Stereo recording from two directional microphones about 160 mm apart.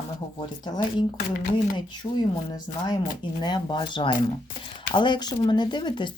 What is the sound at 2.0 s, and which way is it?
Speech, 35° left (ahead or behind).